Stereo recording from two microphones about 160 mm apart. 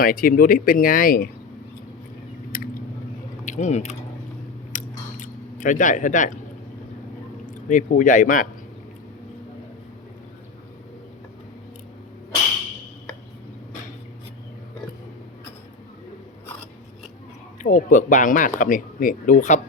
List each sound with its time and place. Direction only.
0.0 s speech: 60° left (ahead or behind)
2.5 s a sound: 60° left (ahead or behind)
3.4 s speech: 50° left (ahead or behind)
4.7 s chewing: 50° left (ahead or behind)
7.4 s speech: 55° left (ahead or behind)
17.6 s speech: 55° left (ahead or behind)